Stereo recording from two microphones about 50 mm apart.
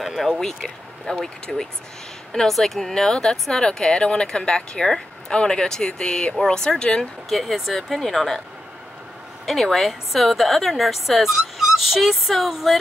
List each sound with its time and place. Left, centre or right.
0.0 s a woman's voice: centre
7.2 s a woman's voice: centre
9.5 s a woman's voice: centre